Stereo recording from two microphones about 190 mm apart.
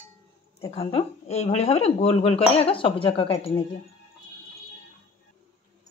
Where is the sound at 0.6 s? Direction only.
30° left (ahead or behind).